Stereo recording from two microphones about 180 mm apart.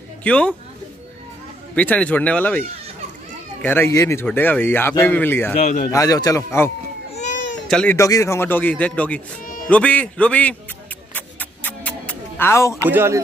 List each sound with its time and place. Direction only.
0.2 s a man's voice: 5° left (ahead or behind)
1.8 s speech: 10° left (ahead or behind)
3.6 s speech: 10° left (ahead or behind)
5.6 s speech: 50° left (ahead or behind)
5.9 s speech: 20° left (ahead or behind)
7.3 s baby cry: 80° left
7.6 s speech: 5° left (ahead or behind)
7.9 s speech: 15° left (ahead or behind)
11.1 s music: 10° left (ahead or behind)
12.9 s speech: 15° right (ahead or behind)